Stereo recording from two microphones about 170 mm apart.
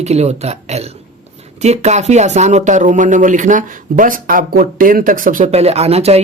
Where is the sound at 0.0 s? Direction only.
40° right (ahead or behind).